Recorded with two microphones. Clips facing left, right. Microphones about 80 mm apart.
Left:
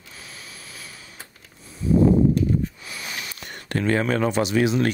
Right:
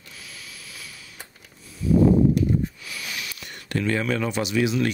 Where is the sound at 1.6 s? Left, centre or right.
Left.